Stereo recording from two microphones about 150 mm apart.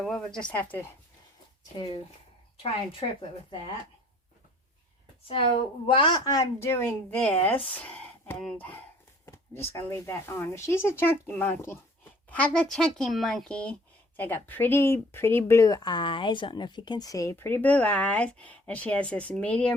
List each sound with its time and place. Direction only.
0.0 s speech: centre (ahead or behind)
2.6 s a woman's voice: 35° left (ahead or behind)
5.9 s speech: 35° left (ahead or behind); by 19.7 s 10° left (ahead or behind)